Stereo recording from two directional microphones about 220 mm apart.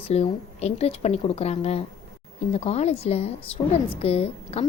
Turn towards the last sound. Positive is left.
turn(degrees=25)  # may be behind; listen again after turning